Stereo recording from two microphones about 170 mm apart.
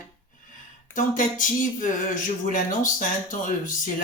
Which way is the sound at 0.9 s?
50° left (ahead or behind).